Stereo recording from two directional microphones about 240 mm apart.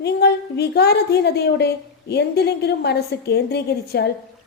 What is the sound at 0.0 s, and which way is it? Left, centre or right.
A woman's voice, left.